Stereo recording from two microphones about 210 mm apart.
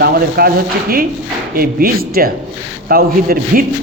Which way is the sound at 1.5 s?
45° right (ahead or behind).